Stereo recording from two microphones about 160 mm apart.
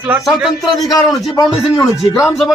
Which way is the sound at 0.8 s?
20° left (ahead or behind).